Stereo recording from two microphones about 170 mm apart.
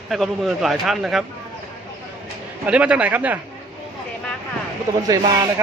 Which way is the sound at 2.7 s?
5° right (ahead or behind).